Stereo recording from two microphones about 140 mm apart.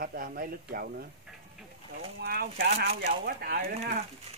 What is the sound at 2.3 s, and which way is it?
A man's voice, 90° right.